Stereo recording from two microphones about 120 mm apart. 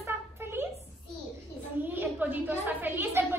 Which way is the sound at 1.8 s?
15° right (ahead or behind).